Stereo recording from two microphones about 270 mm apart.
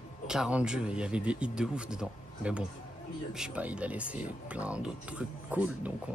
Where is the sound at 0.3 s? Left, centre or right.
Centre.